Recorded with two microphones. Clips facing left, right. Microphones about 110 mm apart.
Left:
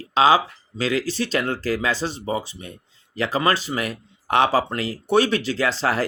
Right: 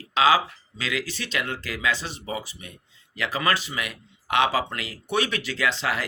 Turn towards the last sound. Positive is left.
turn(degrees=35)  # may be behind; listen again after turning